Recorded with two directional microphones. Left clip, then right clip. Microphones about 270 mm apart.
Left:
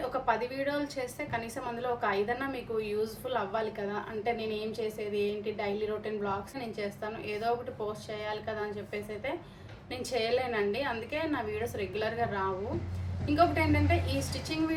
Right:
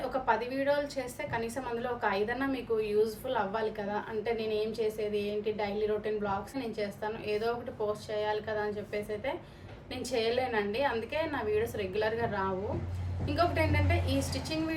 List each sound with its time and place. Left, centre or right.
0.3 s a woman's voice: centre